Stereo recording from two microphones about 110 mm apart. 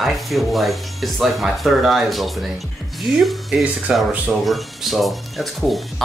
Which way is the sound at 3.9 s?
10° right (ahead or behind).